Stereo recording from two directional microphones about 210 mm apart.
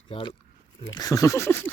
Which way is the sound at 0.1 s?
25° left (ahead or behind).